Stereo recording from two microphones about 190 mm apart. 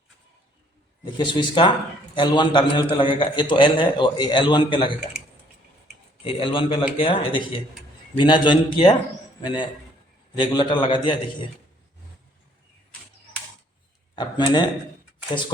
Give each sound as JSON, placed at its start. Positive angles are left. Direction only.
{"t": 1.0, "sound": "a man's voice", "side_deg": 25}
{"t": 6.2, "sound": "a man's voice", "side_deg": 25}
{"t": 14.2, "sound": "a man's voice", "side_deg": 25}